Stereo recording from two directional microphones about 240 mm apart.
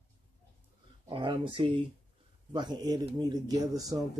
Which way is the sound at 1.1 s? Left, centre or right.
Centre.